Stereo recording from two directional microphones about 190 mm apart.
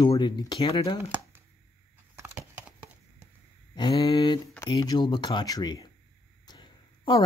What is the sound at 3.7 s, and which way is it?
Speech, 20° left (ahead or behind).